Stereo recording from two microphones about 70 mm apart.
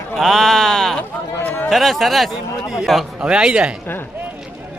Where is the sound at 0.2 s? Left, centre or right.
Centre.